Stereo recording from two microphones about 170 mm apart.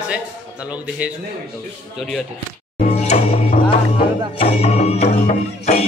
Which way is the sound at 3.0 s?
40° left (ahead or behind).